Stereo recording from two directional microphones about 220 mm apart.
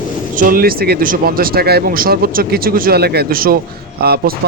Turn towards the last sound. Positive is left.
turn(degrees=-45)  # may be behind; listen again after turning